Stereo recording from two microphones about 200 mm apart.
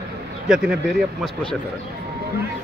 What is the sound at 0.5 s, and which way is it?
Speech, 5° right (ahead or behind).